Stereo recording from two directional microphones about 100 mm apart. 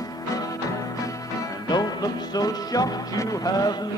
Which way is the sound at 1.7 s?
45° left (ahead or behind).